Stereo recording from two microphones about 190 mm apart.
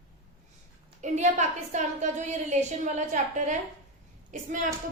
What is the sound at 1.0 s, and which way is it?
A woman's voice, 40° right (ahead or behind).